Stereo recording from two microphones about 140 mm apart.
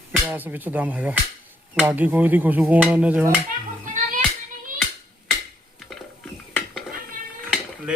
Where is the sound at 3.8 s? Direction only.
65° right (ahead or behind).